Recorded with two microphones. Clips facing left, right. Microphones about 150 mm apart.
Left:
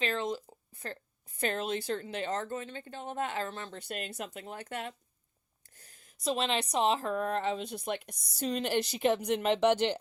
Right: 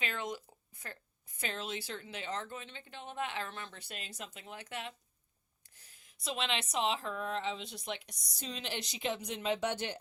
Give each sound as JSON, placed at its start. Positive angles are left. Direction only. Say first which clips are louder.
{"t": 0.0, "sound": "a sound", "louder": "left 6 dB", "side_deg": 30}
{"t": 1.4, "sound": "speech", "louder": "left 7 dB", "side_deg": 50}
{"t": 3.8, "sound": "speech", "louder": "left 8 dB", "side_deg": 50}